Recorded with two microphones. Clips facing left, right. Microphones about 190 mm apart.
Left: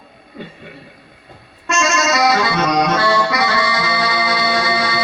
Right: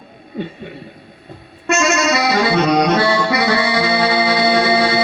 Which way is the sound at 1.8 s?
30° right (ahead or behind).